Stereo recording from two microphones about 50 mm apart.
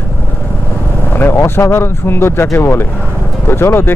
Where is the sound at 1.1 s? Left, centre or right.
Left.